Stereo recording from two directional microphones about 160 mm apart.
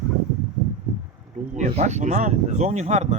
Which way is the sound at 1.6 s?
45° right (ahead or behind).